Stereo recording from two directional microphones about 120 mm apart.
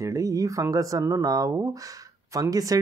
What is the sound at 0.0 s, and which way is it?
Speech, 25° right (ahead or behind).